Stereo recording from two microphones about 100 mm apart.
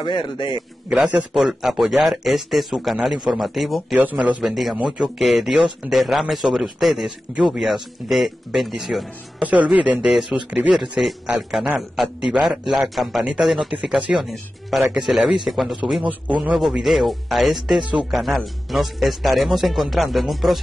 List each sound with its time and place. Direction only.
0.0 s a man's voice: 50° left (ahead or behind)
0.8 s speech: 15° right (ahead or behind)
3.9 s speech: 15° right (ahead or behind)
4.5 s speech: centre (ahead or behind)
9.4 s speech: 15° right (ahead or behind)